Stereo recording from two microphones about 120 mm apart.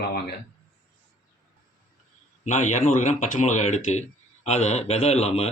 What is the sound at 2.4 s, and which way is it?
Speech, 80° left.